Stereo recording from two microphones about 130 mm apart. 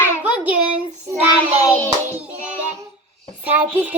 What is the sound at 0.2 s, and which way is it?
Child singing, 10° right (ahead or behind).